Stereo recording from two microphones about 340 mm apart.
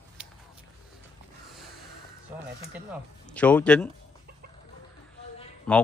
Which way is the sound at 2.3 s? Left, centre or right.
Centre.